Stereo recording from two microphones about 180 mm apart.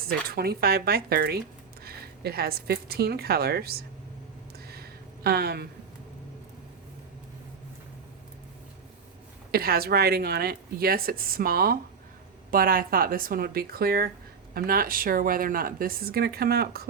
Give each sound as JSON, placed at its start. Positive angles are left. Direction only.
{"t": 0.1, "sound": "a woman's voice", "side_deg": -60}
{"t": 4.7, "sound": "a sound", "side_deg": -60}
{"t": 9.5, "sound": "speech", "side_deg": -55}